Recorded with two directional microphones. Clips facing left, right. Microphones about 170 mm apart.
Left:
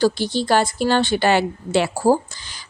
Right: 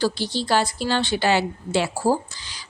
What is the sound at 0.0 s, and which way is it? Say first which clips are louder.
Speech: left 5 dB; 50° left (ahead or behind).